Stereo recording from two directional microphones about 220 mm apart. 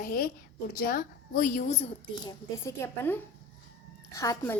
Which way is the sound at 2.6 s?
10° left (ahead or behind).